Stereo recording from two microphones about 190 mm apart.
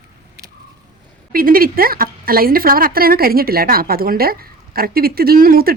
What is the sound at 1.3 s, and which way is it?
A woman's voice, 50° right (ahead or behind).